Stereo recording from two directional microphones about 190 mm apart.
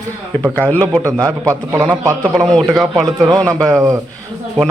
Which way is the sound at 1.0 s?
15° right (ahead or behind).